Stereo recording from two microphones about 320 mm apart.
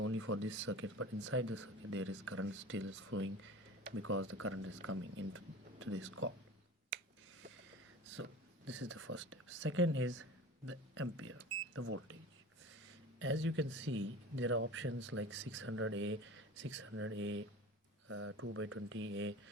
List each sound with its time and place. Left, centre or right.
0.0 s speech: right
8.1 s speech: right
13.1 s speech: right